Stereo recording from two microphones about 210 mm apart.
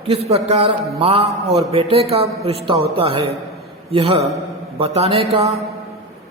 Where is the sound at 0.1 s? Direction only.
30° right (ahead or behind).